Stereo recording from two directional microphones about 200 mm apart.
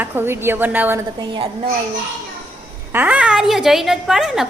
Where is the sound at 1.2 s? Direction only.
25° right (ahead or behind).